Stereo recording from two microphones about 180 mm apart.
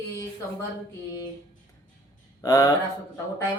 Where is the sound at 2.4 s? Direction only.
20° left (ahead or behind).